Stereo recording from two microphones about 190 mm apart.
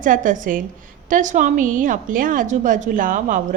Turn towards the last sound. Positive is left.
turn(degrees=-45)  # may be behind; listen again after turning